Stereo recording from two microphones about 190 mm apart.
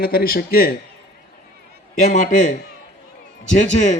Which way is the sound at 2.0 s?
40° left (ahead or behind).